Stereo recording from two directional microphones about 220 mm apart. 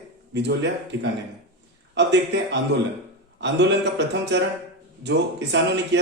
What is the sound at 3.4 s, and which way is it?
A man's voice, 50° right (ahead or behind).